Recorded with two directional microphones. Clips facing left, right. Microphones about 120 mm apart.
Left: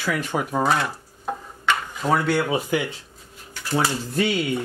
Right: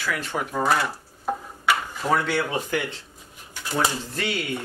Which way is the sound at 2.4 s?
10° left (ahead or behind).